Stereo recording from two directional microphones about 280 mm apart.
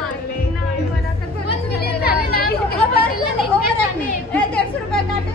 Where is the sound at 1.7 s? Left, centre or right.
Left.